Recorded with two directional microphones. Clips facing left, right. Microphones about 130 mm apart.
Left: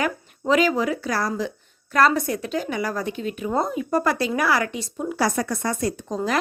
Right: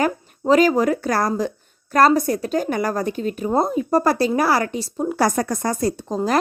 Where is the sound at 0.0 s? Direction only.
40° right (ahead or behind).